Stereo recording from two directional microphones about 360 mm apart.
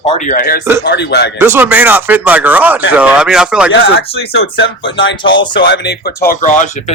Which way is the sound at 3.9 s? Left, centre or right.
Left.